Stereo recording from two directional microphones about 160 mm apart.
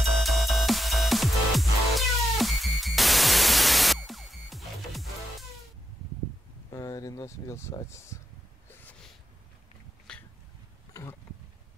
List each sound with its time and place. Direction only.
0.0 s music: centre (ahead or behind)
6.7 s a sound: 20° left (ahead or behind)
10.1 s dog: 5° left (ahead or behind)
10.9 s insect: 20° left (ahead or behind)